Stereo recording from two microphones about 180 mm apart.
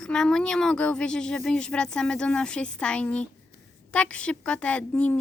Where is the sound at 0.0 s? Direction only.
5° left (ahead or behind).